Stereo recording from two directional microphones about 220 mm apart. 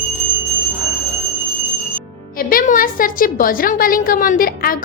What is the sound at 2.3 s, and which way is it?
A woman's voice, 40° left (ahead or behind).